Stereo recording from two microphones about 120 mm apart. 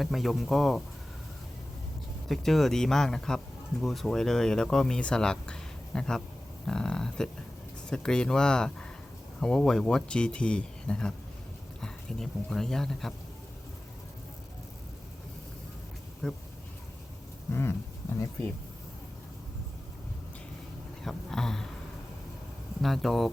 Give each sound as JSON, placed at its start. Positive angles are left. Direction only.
{"t": 0.0, "sound": "speech", "side_deg": 0}
{"t": 2.3, "sound": "speech", "side_deg": 0}
{"t": 16.2, "sound": "speech", "side_deg": 5}
{"t": 17.5, "sound": "a sound", "side_deg": 20}
{"t": 21.0, "sound": "speech", "side_deg": 5}
{"t": 22.8, "sound": "speech", "side_deg": 0}